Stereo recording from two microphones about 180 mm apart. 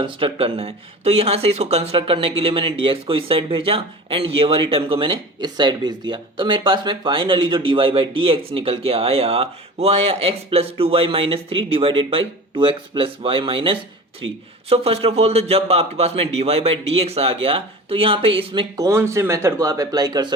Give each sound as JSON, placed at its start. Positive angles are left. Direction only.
{"t": 0.0, "sound": "a man's voice", "side_deg": -25}